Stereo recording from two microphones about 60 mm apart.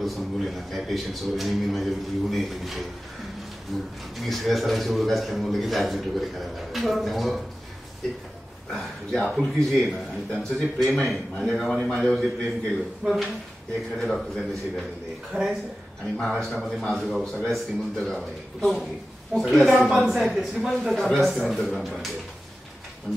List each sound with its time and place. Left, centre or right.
0.0 s a man's voice: centre
8.7 s a man's voice: centre
13.0 s a man's voice: centre
15.3 s speech: centre
16.2 s a man's voice: centre
23.1 s speech: centre